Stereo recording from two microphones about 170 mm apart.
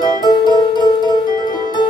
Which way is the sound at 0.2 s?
25° left (ahead or behind).